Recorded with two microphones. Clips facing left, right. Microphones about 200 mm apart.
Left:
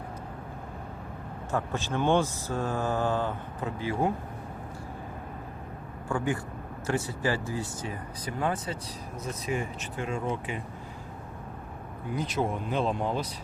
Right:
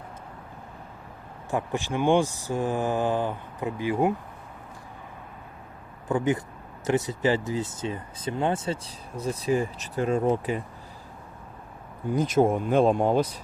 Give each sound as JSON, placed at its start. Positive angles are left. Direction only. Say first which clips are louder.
{"t": 1.5, "sound": "speech", "louder": "right 3 dB", "side_deg": -15}
{"t": 6.1, "sound": "speech", "louder": "right 5 dB", "side_deg": -20}
{"t": 12.1, "sound": "speech", "louder": "right 8 dB", "side_deg": -45}